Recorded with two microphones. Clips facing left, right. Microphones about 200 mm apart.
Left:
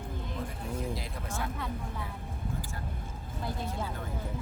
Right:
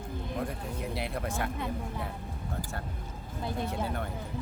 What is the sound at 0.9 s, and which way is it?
Speech, 65° right (ahead or behind).